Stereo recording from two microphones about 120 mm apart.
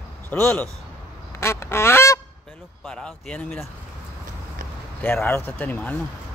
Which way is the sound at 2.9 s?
10° left (ahead or behind).